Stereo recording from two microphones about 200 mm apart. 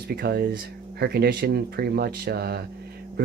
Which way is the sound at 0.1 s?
50° right (ahead or behind).